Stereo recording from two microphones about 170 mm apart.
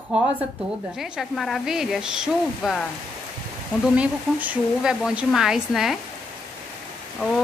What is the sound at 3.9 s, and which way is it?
Speech, 10° right (ahead or behind).